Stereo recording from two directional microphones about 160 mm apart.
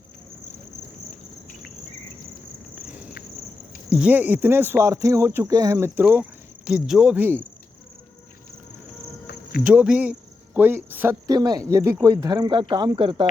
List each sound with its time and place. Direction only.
3.9 s speech: 10° right (ahead or behind)
6.7 s speech: 5° right (ahead or behind)
9.6 s speech: 5° right (ahead or behind); by 13.2 s 30° right (ahead or behind)